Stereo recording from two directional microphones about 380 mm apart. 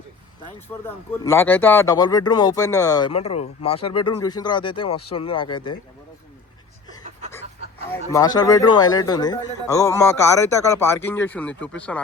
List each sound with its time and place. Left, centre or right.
0.9 s speech: centre
7.9 s speech: centre